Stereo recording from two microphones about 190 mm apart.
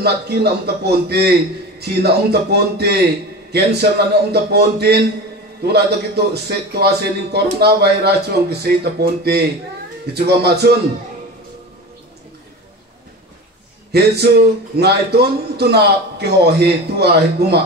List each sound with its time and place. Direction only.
0.0 s a man's voice: 60° right (ahead or behind)
13.9 s a man's voice: 60° right (ahead or behind)